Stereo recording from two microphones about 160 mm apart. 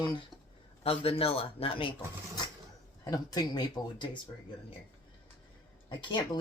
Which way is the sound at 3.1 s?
25° left (ahead or behind).